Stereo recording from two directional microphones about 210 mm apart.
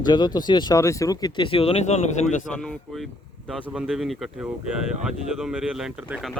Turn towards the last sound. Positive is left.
turn(degrees=-5)  # may be behind; listen again after turning